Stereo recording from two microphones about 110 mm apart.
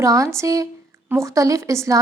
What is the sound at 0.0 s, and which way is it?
A woman's voice, 30° right (ahead or behind).